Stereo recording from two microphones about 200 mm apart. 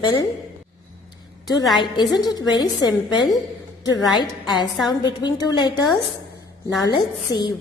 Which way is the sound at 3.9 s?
20° left (ahead or behind).